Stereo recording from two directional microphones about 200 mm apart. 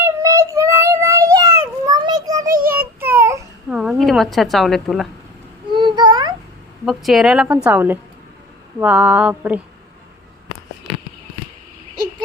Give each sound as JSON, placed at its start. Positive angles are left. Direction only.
{"t": 0.0, "sound": "child singing", "side_deg": -15}
{"t": 2.5, "sound": "child singing", "side_deg": -45}
{"t": 2.7, "sound": "babbling", "side_deg": -10}
{"t": 5.7, "sound": "a sound", "side_deg": -20}
{"t": 6.8, "sound": "a woman's voice", "side_deg": 0}